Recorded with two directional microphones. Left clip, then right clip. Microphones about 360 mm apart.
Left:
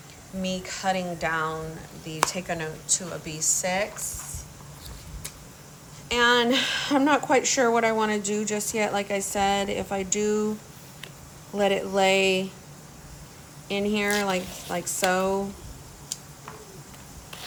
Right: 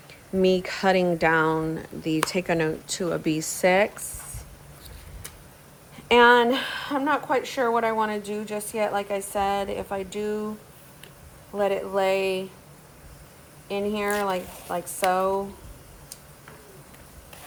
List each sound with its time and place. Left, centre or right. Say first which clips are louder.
0.4 s a woman's voice: right 6 dB; right
6.1 s a woman's voice: right 4 dB; centre
11.5 s a woman's voice: left 1 dB; centre
13.7 s a woman's voice: left 1 dB; centre